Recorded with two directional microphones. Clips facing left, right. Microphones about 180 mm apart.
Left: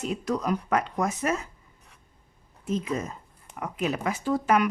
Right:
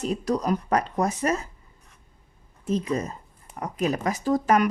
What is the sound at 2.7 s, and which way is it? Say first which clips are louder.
Speech: right 3 dB; 35° right (ahead or behind).